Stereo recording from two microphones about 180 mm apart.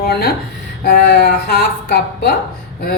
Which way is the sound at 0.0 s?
60° left (ahead or behind).